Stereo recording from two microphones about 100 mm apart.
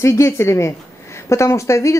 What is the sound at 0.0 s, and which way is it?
A woman's voice, 30° left (ahead or behind).